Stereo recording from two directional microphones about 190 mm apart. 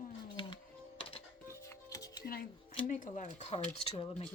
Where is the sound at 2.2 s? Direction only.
55° left (ahead or behind); by 4.2 s 30° left (ahead or behind).